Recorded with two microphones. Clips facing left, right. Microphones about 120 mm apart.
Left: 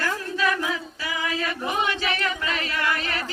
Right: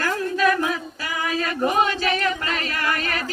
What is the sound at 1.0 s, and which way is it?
Choir, 45° right (ahead or behind).